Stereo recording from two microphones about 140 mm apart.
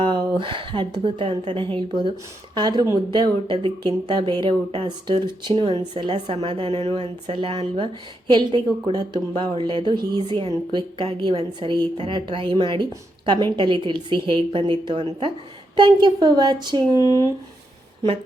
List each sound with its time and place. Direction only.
0.0 s a woman's voice: 35° right (ahead or behind)
8.3 s speech: 35° right (ahead or behind)